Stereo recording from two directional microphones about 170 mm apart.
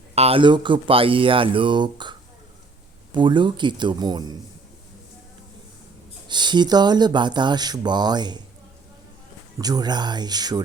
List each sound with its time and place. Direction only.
0.1 s speech: 35° right (ahead or behind)
6.2 s speech: 25° right (ahead or behind)
9.6 s speech: 25° right (ahead or behind)